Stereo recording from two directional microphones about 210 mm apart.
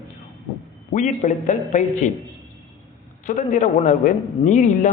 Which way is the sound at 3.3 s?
40° left (ahead or behind).